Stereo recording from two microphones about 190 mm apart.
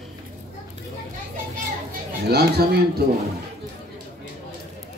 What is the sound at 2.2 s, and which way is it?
Speech, 55° right (ahead or behind).